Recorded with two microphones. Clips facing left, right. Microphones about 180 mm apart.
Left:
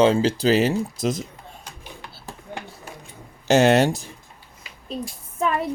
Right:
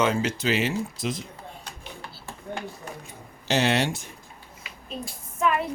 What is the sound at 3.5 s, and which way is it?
Speech, 45° left (ahead or behind).